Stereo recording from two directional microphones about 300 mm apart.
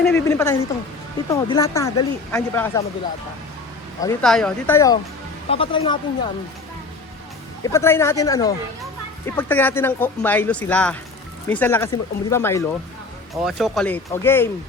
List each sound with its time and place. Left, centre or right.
0.0 s speech: centre
4.0 s speech: centre
7.6 s speech: centre